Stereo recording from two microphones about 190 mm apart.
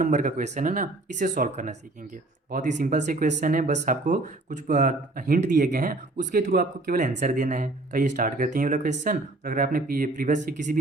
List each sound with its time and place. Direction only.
0.0 s speech: 45° right (ahead or behind)